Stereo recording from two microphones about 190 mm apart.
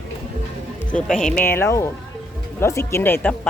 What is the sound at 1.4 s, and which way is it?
Speech, 10° left (ahead or behind).